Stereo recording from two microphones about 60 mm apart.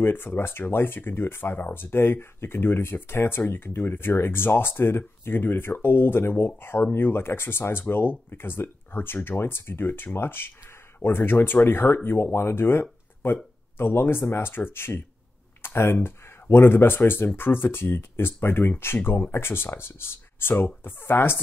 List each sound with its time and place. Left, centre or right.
0.0 s speech: left